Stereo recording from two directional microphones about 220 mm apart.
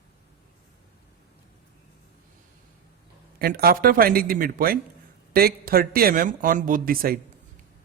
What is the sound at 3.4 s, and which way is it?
Speech, 45° right (ahead or behind).